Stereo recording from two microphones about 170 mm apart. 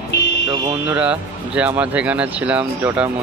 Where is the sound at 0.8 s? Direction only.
5° right (ahead or behind).